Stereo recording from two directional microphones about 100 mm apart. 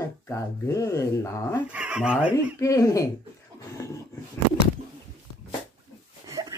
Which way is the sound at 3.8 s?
30° left (ahead or behind).